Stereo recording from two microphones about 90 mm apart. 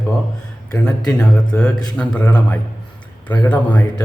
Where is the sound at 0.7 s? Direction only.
10° left (ahead or behind).